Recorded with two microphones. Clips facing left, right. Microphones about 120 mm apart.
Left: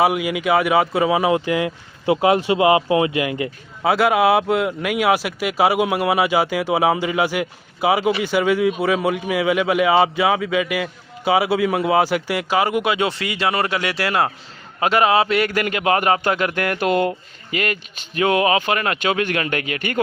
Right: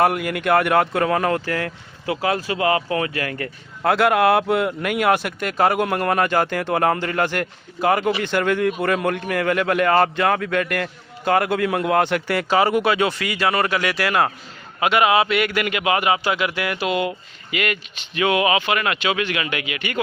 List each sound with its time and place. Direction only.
0.0 s speech: 5° left (ahead or behind)
2.0 s speech: 25° left (ahead or behind)
3.8 s a man's voice: 5° left (ahead or behind); by 20.0 s 45° left (ahead or behind)